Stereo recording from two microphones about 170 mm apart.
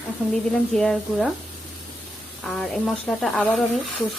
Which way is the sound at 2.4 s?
Centre (ahead or behind).